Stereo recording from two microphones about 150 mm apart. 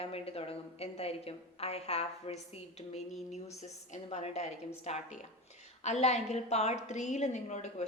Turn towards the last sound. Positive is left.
turn(degrees=50)  # may be behind; listen again after turning